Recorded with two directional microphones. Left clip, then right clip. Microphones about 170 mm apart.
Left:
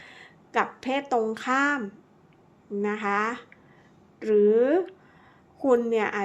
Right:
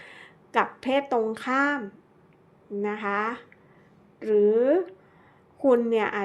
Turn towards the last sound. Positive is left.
turn(degrees=-10)  # may be behind; listen again after turning